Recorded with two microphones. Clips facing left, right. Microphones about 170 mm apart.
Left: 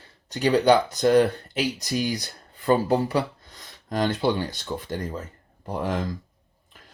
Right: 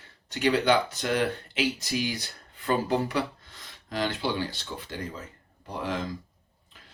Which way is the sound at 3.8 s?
45° left (ahead or behind).